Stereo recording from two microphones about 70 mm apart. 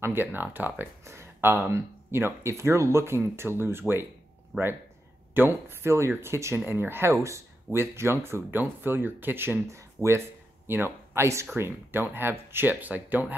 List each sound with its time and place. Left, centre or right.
0.0 s speech: right
1.0 s speech: right
4.5 s speech: centre
5.3 s speech: right